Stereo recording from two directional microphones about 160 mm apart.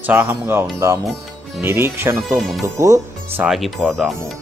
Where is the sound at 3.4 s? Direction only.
Centre (ahead or behind).